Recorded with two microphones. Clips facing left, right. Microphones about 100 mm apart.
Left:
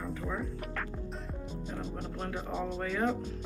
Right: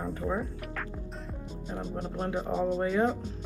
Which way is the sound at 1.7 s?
25° right (ahead or behind).